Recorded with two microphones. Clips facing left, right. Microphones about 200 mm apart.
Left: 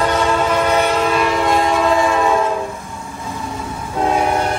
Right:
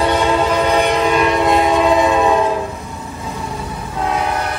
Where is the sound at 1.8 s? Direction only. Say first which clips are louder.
Right 2 dB; 15° right (ahead or behind).